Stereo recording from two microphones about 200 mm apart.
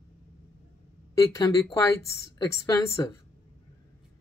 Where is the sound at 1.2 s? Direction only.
15° left (ahead or behind).